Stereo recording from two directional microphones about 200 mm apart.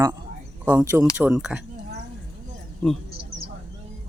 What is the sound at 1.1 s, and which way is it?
Speech, 5° right (ahead or behind).